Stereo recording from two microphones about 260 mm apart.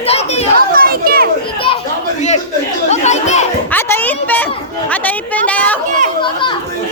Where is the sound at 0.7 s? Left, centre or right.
Right.